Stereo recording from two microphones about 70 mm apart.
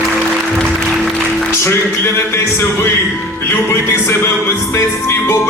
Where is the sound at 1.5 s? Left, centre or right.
Left.